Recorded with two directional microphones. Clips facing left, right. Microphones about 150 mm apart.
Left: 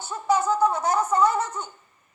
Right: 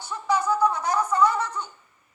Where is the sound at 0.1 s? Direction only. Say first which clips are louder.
Left 2 dB; 25° left (ahead or behind).